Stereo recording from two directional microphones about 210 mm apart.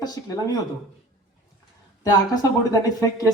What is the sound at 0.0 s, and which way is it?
Speech, 20° left (ahead or behind).